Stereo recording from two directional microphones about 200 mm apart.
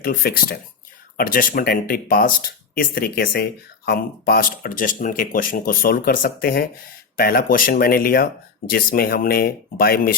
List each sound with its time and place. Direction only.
0.0 s speech: 45° left (ahead or behind)